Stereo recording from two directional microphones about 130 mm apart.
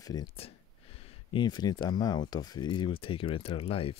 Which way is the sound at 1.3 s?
35° left (ahead or behind).